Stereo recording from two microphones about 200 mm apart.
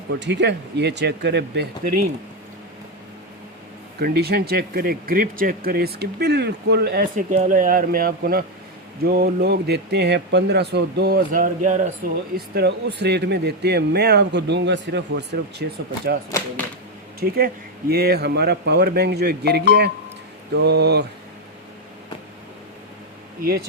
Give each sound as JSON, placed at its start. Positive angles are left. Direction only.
{"t": 0.1, "sound": "speech", "side_deg": -60}
{"t": 4.0, "sound": "speech", "side_deg": -55}
{"t": 7.3, "sound": "speech", "side_deg": -40}
{"t": 12.5, "sound": "speech", "side_deg": -55}
{"t": 17.2, "sound": "speech", "side_deg": -50}
{"t": 23.4, "sound": "speech", "side_deg": -50}